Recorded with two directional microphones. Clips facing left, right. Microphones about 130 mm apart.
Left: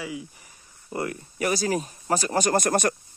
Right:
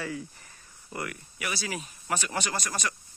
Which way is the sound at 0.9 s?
30° left (ahead or behind).